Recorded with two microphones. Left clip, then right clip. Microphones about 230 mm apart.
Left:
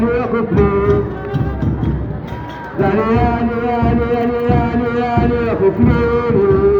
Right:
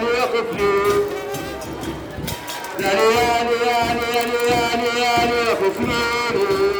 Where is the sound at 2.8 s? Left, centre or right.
Right.